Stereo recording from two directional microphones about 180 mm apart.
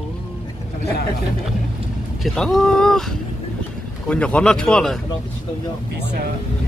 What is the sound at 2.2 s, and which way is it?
Speech, centre (ahead or behind).